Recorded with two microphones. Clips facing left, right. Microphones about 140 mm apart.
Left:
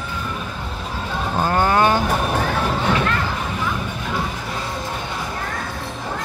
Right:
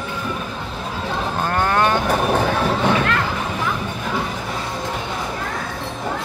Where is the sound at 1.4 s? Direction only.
10° left (ahead or behind).